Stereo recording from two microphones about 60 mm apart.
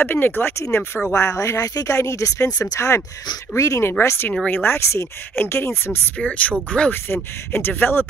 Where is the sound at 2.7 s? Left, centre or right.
Left.